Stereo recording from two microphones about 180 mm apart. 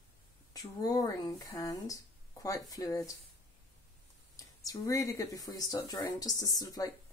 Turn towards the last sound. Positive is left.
turn(degrees=20)  # may be behind; listen again after turning